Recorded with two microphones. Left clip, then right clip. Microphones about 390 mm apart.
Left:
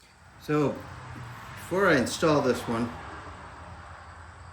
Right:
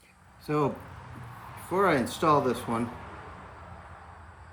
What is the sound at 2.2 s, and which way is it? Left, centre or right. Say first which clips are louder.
Speech: even; centre.